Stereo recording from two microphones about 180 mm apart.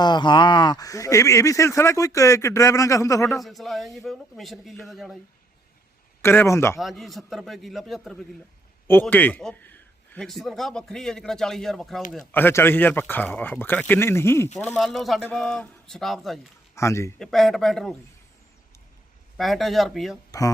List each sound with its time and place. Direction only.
0.0 s speech: 25° left (ahead or behind)
3.3 s a man's voice: centre (ahead or behind)
6.2 s speech: 15° left (ahead or behind)
6.7 s a man's voice: centre (ahead or behind)
12.3 s a man's voice: 10° left (ahead or behind)
16.7 s a man's voice: 15° left (ahead or behind)
17.2 s a man's voice: centre (ahead or behind)
19.4 s a man's voice: centre (ahead or behind)